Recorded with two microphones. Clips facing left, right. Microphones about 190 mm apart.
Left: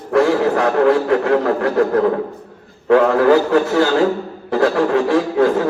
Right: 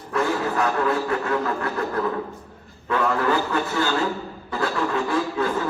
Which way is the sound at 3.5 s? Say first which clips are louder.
Left 9 dB; 75° left (ahead or behind).